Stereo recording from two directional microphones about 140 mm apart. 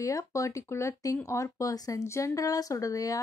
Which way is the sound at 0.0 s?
25° left (ahead or behind).